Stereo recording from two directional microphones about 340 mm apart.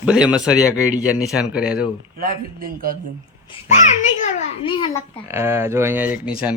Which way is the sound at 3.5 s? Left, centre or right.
Left.